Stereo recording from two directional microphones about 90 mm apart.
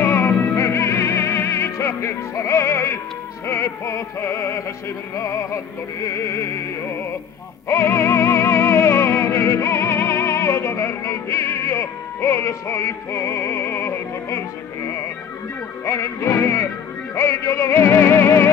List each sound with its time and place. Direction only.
0.0 s music: 25° left (ahead or behind)